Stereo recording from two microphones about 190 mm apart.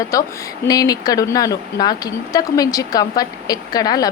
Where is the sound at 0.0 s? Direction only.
15° left (ahead or behind).